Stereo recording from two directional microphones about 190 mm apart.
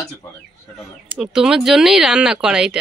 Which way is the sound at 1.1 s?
5° right (ahead or behind).